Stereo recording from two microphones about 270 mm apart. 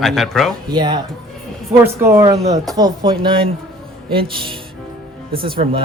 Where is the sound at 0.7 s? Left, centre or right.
Centre.